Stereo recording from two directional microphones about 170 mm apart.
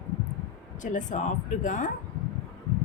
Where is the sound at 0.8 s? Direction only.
45° left (ahead or behind).